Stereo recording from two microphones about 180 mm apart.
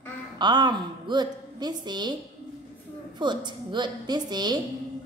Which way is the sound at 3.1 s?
25° right (ahead or behind).